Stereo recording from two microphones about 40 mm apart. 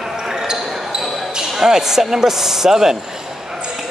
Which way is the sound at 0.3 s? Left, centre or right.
Centre.